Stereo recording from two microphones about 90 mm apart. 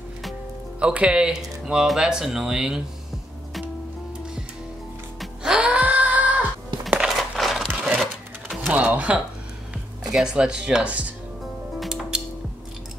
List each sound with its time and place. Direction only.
0.7 s speech: 10° right (ahead or behind)
5.2 s music: 5° right (ahead or behind)
6.9 s music: 5° right (ahead or behind)
8.7 s music: 15° right (ahead or behind)
10.1 s speech: 10° right (ahead or behind)
11.8 s music: 5° right (ahead or behind)